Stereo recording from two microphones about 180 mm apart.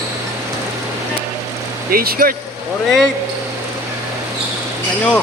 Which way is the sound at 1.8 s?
55° right (ahead or behind).